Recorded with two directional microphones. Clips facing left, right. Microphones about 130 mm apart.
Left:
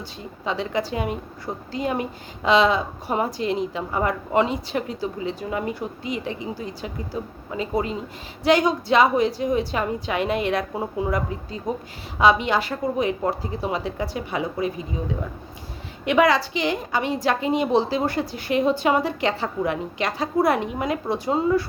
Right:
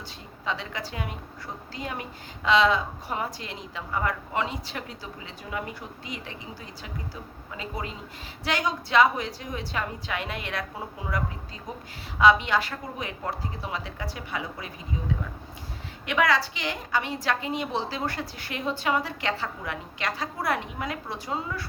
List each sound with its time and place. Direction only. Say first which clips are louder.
0.4 s a woman's voice: left 7 dB; 20° left (ahead or behind)
6.1 s speech: left 9 dB; 15° left (ahead or behind)
7.5 s a woman's voice: left 10 dB; 25° left (ahead or behind)
16.0 s a woman's voice: left 6 dB; 20° left (ahead or behind)